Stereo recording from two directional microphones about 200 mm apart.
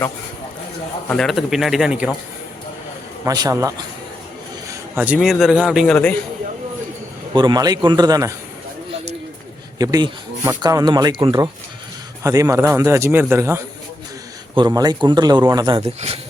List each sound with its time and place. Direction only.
1.0 s a man's voice: 5° left (ahead or behind)
3.2 s a man's voice: 20° right (ahead or behind); by 6.1 s 5° left (ahead or behind)
7.3 s speech: 20° right (ahead or behind)
9.7 s a man's voice: 20° right (ahead or behind)